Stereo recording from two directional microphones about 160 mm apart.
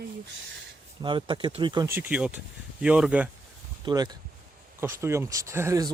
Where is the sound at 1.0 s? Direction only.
30° right (ahead or behind).